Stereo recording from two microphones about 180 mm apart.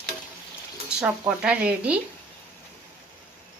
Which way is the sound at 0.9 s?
5° right (ahead or behind).